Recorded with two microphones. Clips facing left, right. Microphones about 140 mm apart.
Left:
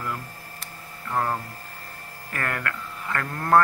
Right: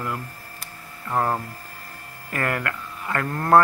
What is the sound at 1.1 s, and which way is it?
Hum, 30° right (ahead or behind).